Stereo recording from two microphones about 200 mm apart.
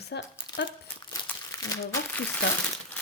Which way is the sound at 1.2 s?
15° left (ahead or behind).